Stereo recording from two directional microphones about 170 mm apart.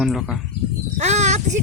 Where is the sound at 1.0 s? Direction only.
40° right (ahead or behind).